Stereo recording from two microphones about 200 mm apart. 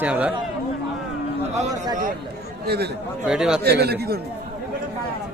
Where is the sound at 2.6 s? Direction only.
55° right (ahead or behind).